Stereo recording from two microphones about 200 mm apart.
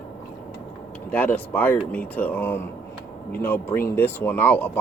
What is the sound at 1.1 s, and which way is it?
Speech, 10° left (ahead or behind).